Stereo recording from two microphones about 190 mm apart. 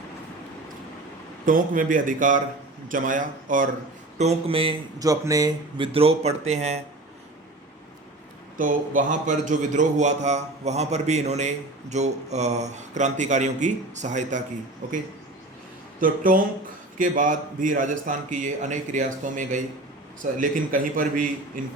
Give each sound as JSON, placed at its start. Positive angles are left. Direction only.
{"t": 1.5, "sound": "a man's voice", "side_deg": -45}
{"t": 4.2, "sound": "speech", "side_deg": -30}
{"t": 8.5, "sound": "a man's voice", "side_deg": -45}
{"t": 16.0, "sound": "a man's voice", "side_deg": -45}